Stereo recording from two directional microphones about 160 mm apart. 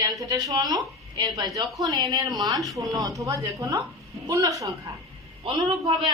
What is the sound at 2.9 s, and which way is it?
A woman's voice, 20° right (ahead or behind).